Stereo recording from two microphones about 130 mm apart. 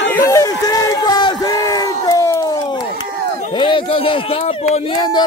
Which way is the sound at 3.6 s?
40° left (ahead or behind).